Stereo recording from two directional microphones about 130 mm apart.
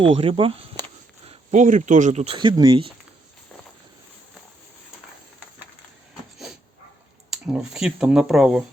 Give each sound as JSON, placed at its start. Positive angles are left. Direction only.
{"t": 0.0, "sound": "speech", "side_deg": -45}
{"t": 1.2, "sound": "a sound", "side_deg": -50}
{"t": 1.5, "sound": "speech", "side_deg": -80}
{"t": 2.4, "sound": "speech", "side_deg": -35}
{"t": 7.3, "sound": "speech", "side_deg": -5}